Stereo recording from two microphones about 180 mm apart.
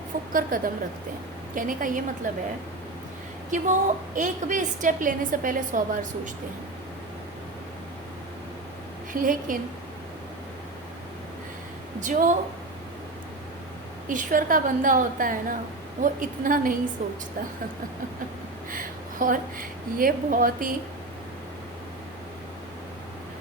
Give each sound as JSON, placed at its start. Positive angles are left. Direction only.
{"t": 0.3, "sound": "a woman's voice", "side_deg": -50}
{"t": 3.5, "sound": "a woman's voice", "side_deg": -45}
{"t": 9.1, "sound": "a woman's voice", "side_deg": -50}
{"t": 11.9, "sound": "a woman's voice", "side_deg": -45}
{"t": 14.1, "sound": "a woman's voice", "side_deg": -45}
{"t": 18.7, "sound": "a woman's voice", "side_deg": -50}